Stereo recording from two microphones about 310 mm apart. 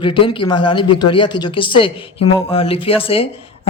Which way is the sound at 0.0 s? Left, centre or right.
Centre.